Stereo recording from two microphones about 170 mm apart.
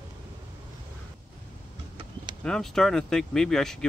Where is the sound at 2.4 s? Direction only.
5° left (ahead or behind).